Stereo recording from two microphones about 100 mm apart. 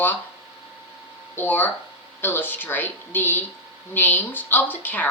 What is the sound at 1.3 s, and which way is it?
Speech, 20° left (ahead or behind).